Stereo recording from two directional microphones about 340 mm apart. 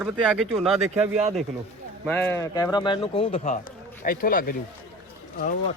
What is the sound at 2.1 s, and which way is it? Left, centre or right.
Speech, centre.